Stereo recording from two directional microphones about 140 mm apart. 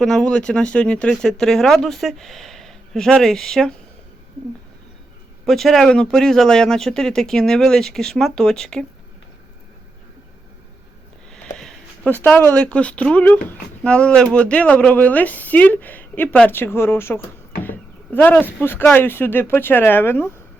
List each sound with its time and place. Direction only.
0.0 s speech: 5° left (ahead or behind)
5.5 s speech: centre (ahead or behind)
11.5 s a sound: 5° left (ahead or behind)
12.5 s speech: 10° left (ahead or behind)